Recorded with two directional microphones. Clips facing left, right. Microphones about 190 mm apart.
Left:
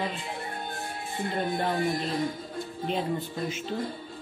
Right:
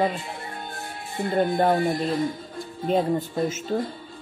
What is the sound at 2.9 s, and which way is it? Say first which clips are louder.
Speech: right 8 dB; 45° right (ahead or behind).